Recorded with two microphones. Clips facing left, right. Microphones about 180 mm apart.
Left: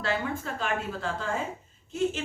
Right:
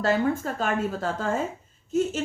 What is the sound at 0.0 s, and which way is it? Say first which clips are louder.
A woman's voice: right 7 dB; 40° right (ahead or behind).